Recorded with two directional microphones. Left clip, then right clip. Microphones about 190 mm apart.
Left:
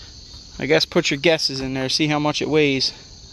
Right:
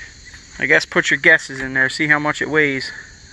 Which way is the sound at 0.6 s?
35° left (ahead or behind).